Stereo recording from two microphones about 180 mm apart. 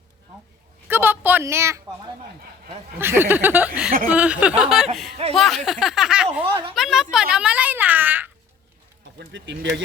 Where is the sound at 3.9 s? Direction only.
50° right (ahead or behind).